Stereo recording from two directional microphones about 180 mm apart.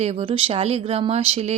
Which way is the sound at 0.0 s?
35° right (ahead or behind).